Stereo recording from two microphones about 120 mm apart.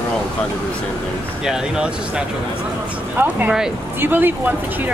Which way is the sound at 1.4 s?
5° right (ahead or behind).